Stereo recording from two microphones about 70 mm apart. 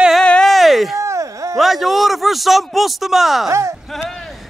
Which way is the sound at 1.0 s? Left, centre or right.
Right.